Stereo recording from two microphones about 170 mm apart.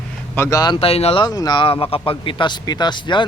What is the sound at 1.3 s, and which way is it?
Speech, 25° left (ahead or behind).